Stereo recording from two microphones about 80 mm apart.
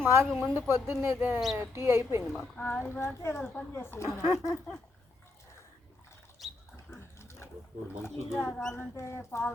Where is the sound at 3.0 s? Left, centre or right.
Left.